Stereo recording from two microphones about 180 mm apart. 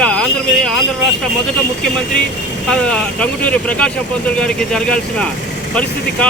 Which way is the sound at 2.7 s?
5° left (ahead or behind).